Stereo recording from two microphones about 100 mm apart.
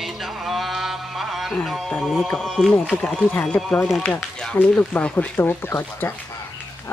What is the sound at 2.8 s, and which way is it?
Speech, 15° left (ahead or behind).